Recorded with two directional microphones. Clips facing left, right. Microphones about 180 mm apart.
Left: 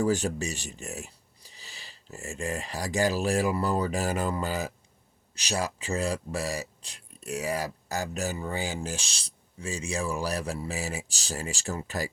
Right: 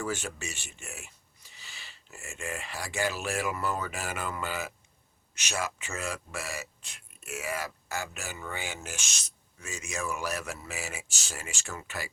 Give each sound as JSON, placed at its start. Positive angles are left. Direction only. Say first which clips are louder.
{"t": 0.0, "sound": "speech", "louder": "left 8 dB", "side_deg": 35}